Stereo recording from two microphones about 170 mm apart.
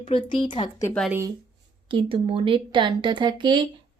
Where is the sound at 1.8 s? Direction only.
30° right (ahead or behind).